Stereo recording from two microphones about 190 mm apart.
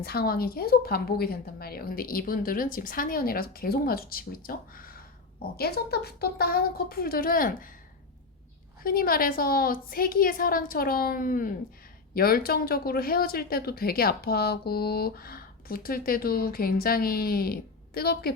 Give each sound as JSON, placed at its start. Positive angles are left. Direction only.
{"t": 0.0, "sound": "a woman's voice", "side_deg": 55}
{"t": 8.8, "sound": "a woman's voice", "side_deg": 50}